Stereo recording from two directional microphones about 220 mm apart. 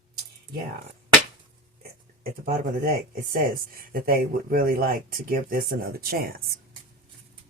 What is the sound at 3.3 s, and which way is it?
Speech, 40° right (ahead or behind).